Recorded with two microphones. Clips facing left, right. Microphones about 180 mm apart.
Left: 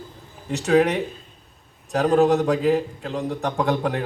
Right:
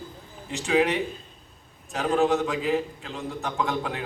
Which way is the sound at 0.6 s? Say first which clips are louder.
Left 4 dB; 45° left (ahead or behind).